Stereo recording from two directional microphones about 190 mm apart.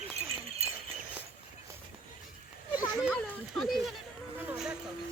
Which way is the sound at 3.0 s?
Centre (ahead or behind).